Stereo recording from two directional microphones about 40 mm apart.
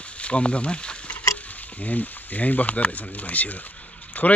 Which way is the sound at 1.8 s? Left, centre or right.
Left.